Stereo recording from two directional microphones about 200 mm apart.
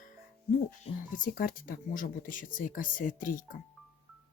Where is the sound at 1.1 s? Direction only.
45° left (ahead or behind).